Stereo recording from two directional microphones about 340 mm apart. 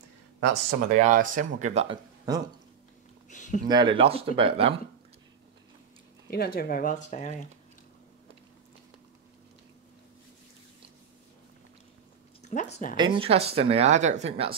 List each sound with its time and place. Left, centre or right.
0.7 s speech: right
3.3 s a sound: left
3.6 s speech: centre
6.3 s speech: left
12.4 s speech: centre
12.9 s speech: centre